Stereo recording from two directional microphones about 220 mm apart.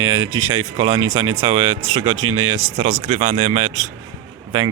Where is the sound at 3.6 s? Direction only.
75° right (ahead or behind).